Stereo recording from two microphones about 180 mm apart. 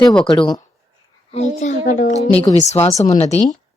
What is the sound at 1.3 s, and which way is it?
A child's voice, 40° left (ahead or behind).